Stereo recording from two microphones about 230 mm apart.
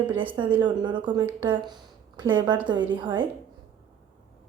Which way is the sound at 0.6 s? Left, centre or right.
Centre.